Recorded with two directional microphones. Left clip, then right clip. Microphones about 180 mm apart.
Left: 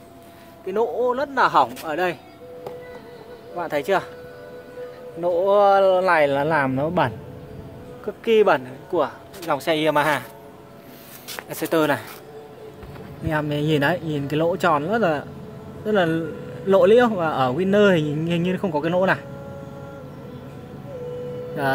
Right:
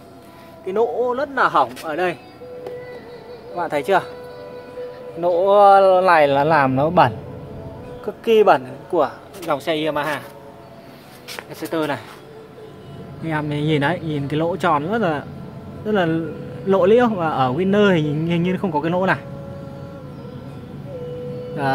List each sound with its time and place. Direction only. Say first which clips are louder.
0.7 s speech: right 2 dB; 15° left (ahead or behind)
3.5 s speech: right 3 dB; 5° left (ahead or behind)
5.2 s speech: right 4 dB; 10° left (ahead or behind)
9.4 s speech: even; 20° left (ahead or behind)
9.9 s speech: left 3 dB; 40° left (ahead or behind)
11.5 s speech: left 3 dB; 35° left (ahead or behind)
13.3 s a man's voice: right 1 dB; 5° left (ahead or behind)